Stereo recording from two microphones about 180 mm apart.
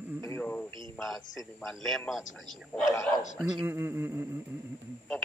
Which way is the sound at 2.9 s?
20° left (ahead or behind).